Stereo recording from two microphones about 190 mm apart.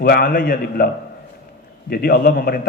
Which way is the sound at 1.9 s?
50° left (ahead or behind).